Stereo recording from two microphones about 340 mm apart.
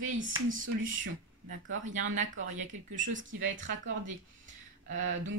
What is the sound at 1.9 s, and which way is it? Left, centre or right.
Speech, right.